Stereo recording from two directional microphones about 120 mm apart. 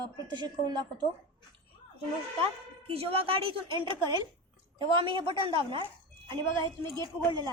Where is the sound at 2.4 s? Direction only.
55° right (ahead or behind).